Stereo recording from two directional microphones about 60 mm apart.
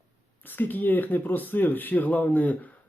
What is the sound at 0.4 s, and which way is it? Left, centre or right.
Speech, left.